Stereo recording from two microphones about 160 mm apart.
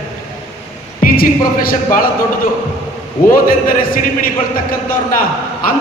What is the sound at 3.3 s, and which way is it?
Speech, 60° left (ahead or behind).